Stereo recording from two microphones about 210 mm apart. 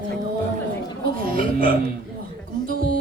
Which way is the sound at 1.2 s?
45° right (ahead or behind).